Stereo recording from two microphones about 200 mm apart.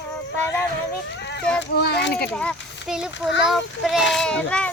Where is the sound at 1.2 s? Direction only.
60° left (ahead or behind).